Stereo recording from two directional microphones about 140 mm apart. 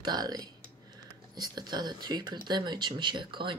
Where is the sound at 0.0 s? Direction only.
30° right (ahead or behind).